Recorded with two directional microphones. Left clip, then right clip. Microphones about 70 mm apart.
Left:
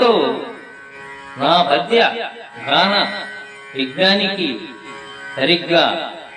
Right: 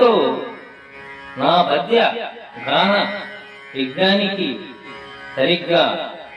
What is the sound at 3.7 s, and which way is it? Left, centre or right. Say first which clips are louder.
Music: left 2 dB; left.